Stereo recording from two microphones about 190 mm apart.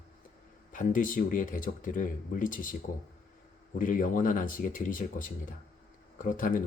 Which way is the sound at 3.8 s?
45° left (ahead or behind).